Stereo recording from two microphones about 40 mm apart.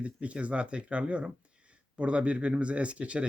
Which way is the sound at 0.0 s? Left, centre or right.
Right.